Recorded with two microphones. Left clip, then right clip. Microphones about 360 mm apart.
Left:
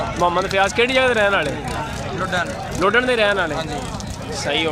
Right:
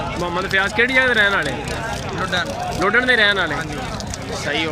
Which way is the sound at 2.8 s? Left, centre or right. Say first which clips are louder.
Right 1 dB; centre.